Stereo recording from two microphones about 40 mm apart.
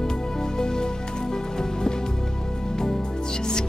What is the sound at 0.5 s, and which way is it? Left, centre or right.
Music, centre.